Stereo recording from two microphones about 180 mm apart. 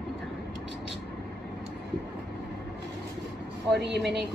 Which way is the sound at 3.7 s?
70° right (ahead or behind).